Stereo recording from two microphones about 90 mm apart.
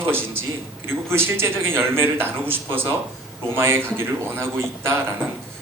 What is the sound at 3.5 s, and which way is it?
A man's voice, 30° right (ahead or behind).